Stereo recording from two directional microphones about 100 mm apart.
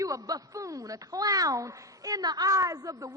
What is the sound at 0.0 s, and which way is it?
A man's voice, 35° right (ahead or behind).